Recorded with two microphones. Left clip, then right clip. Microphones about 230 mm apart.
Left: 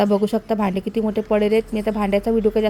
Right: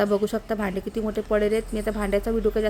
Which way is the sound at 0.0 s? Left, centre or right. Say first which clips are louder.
Left 4 dB; centre.